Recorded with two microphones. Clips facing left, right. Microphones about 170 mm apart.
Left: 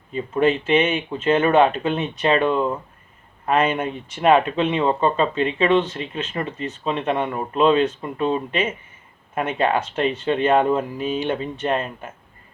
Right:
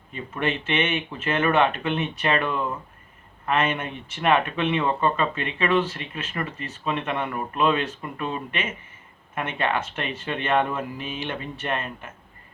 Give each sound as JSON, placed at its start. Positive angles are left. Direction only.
{"t": 0.3, "sound": "speech", "side_deg": 35}